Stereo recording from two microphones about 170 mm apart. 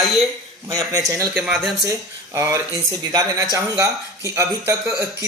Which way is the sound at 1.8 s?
20° right (ahead or behind).